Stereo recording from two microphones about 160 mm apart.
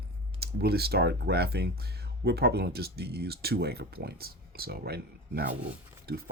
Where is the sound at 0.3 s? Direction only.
80° right.